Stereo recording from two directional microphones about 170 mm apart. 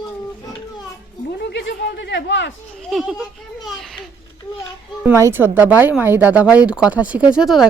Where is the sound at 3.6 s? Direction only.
Centre (ahead or behind).